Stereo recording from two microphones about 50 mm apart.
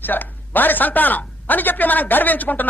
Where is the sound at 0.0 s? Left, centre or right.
Left.